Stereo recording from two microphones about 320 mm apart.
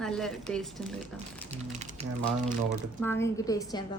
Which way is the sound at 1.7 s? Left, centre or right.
Right.